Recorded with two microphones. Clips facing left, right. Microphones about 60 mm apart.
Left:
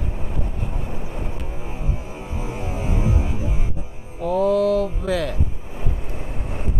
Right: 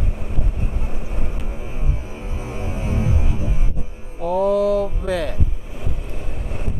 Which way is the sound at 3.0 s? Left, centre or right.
Left.